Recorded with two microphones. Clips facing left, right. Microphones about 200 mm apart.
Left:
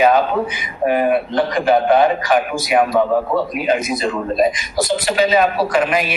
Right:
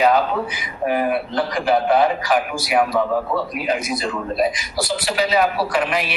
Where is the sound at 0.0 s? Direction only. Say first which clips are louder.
Left 3 dB; 20° left (ahead or behind).